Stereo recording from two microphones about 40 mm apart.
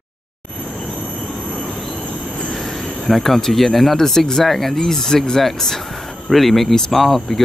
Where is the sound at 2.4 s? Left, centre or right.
Centre.